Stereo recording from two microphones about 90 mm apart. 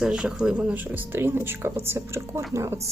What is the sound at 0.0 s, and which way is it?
A woman's voice, 5° right (ahead or behind).